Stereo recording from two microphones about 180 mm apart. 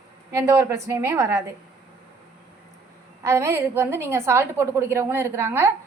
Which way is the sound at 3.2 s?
15° right (ahead or behind).